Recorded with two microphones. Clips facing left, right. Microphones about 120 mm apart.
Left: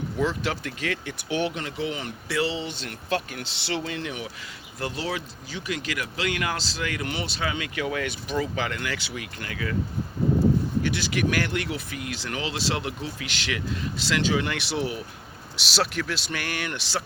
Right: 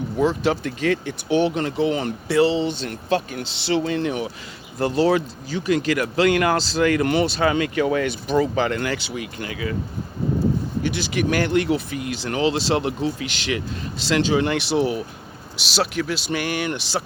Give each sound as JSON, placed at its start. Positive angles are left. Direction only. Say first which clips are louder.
{"t": 0.2, "sound": "speech", "louder": "right 7 dB", "side_deg": -25}
{"t": 9.1, "sound": "speech", "louder": "right 5 dB", "side_deg": -20}
{"t": 10.8, "sound": "speech", "louder": "right 3 dB", "side_deg": -20}
{"t": 15.6, "sound": "speech", "louder": "right 4 dB", "side_deg": -5}
{"t": 16.3, "sound": "speech", "louder": "right 7 dB", "side_deg": -15}